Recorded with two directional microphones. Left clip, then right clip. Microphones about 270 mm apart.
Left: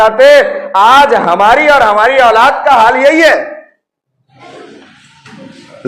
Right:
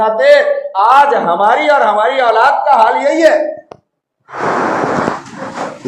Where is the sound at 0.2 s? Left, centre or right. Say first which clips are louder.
Left 4 dB; left.